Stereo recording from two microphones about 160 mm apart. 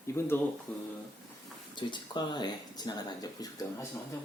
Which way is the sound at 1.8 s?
30° left (ahead or behind).